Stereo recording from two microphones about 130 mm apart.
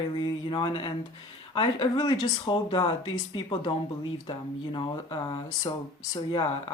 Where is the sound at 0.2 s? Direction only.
40° left (ahead or behind).